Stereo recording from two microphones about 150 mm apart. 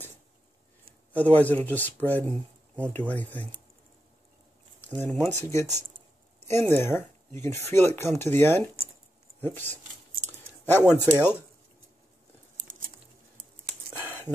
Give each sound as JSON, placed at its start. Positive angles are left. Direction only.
{"t": 1.1, "sound": "speech", "side_deg": 10}
{"t": 4.8, "sound": "speech", "side_deg": 10}
{"t": 10.2, "sound": "a sound", "side_deg": 15}
{"t": 10.9, "sound": "speech", "side_deg": -10}